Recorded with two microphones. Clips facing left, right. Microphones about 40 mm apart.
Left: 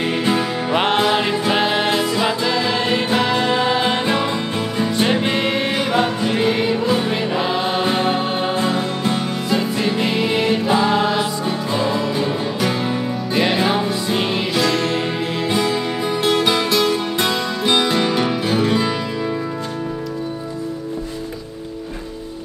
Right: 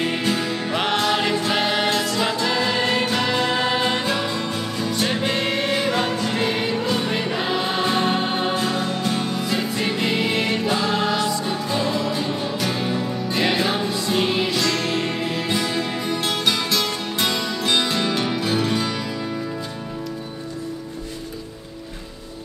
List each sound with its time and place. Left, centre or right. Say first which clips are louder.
0.0 s music: left 4 dB; centre
3.8 s music: left 3 dB; left
9.5 s music: left 7 dB; centre
13.3 s music: left 4 dB; centre
18.1 s music: left 3 dB; centre